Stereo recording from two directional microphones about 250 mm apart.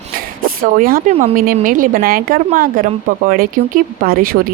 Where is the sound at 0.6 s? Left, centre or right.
Right.